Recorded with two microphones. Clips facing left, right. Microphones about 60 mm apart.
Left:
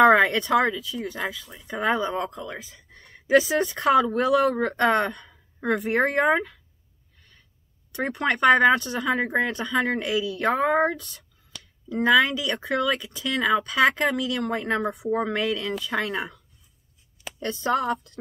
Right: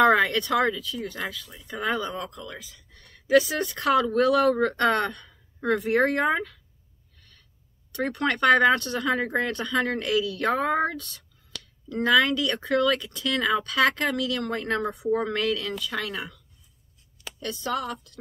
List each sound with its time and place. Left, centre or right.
0.0 s a woman's voice: left
1.9 s a woman's voice: left
7.2 s gasp: centre
7.9 s a woman's voice: centre